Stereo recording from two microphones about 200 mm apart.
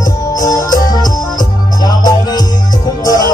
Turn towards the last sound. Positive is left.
turn(degrees=20)  # may be behind; listen again after turning